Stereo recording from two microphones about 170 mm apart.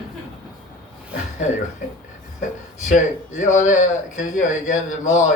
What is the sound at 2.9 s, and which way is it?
Speech, 45° left (ahead or behind).